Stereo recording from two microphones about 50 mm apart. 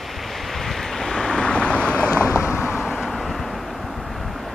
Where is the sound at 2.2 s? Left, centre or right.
Right.